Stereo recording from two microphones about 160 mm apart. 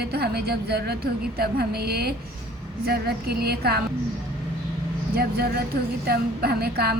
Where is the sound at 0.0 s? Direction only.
85° right.